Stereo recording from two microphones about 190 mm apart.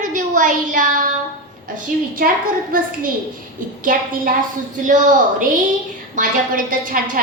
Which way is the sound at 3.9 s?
45° right (ahead or behind).